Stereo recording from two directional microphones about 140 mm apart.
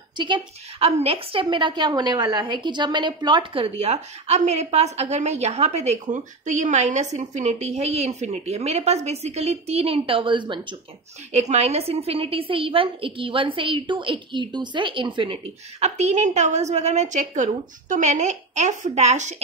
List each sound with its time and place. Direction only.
0.2 s a woman's voice: 40° right (ahead or behind)
11.3 s a woman's voice: 50° right (ahead or behind)